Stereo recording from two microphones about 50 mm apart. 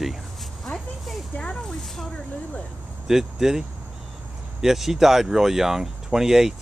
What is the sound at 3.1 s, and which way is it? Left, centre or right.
Speech, centre.